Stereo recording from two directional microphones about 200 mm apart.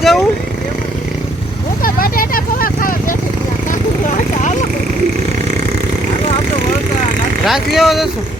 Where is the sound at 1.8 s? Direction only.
45° left (ahead or behind).